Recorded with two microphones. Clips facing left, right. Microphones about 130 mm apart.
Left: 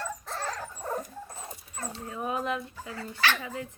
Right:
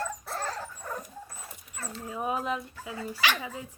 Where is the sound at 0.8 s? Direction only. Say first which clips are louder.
Left 6 dB; 30° left (ahead or behind).